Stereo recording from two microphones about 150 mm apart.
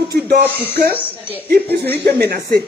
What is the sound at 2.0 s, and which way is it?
Speech, 90° right.